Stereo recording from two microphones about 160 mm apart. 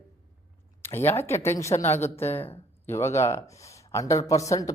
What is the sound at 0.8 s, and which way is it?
A woman's voice, 15° left (ahead or behind).